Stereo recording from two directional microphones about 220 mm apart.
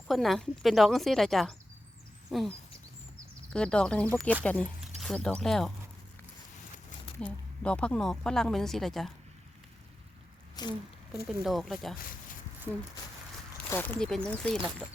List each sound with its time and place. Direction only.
0.1 s speech: centre (ahead or behind)
3.5 s speech: 5° left (ahead or behind)
7.2 s speech: 5° left (ahead or behind)
10.5 s a sound: 20° left (ahead or behind)
11.4 s speech: centre (ahead or behind)
13.7 s speech: 10° left (ahead or behind)